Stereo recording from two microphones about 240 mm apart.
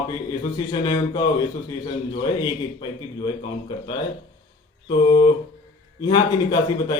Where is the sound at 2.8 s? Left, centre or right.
Centre.